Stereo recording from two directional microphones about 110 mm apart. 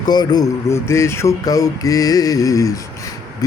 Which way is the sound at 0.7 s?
25° left (ahead or behind).